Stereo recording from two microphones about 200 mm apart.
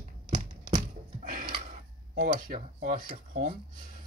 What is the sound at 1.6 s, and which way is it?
Cutlery, 45° right (ahead or behind).